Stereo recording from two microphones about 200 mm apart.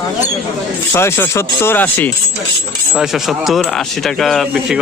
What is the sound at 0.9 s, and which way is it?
Speech, 15° left (ahead or behind).